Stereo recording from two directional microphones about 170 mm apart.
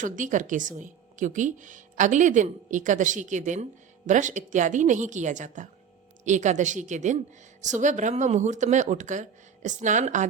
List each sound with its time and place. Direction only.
0.0 s a woman's voice: 50° right (ahead or behind)